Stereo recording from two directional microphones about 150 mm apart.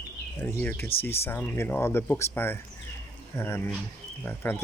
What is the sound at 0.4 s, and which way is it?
Speech, 10° left (ahead or behind).